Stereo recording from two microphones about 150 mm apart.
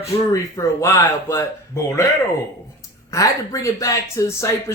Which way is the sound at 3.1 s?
20° left (ahead or behind).